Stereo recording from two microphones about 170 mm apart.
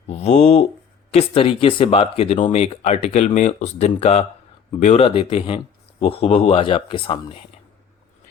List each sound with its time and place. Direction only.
0.1 s speech: 40° left (ahead or behind)